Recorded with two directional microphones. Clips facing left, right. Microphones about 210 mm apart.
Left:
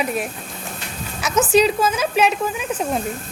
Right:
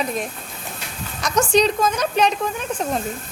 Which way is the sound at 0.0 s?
10° left (ahead or behind).